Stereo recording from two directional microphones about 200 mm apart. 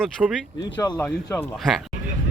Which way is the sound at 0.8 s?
20° left (ahead or behind).